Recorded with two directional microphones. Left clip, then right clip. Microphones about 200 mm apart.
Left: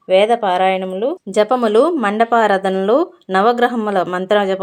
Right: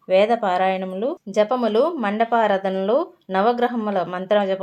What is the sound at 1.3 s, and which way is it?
Speech, 35° left (ahead or behind).